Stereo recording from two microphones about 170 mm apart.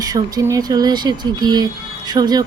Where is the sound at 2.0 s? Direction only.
25° right (ahead or behind).